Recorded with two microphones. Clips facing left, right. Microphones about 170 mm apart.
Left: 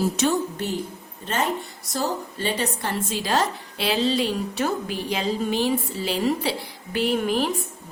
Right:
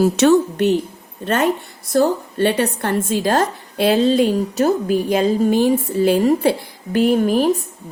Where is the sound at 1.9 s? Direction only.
60° right (ahead or behind).